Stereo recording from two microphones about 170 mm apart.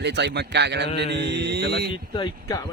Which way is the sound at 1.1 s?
85° right.